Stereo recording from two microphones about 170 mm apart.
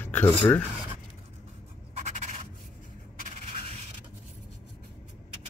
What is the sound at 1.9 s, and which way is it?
Rub, 45° right (ahead or behind).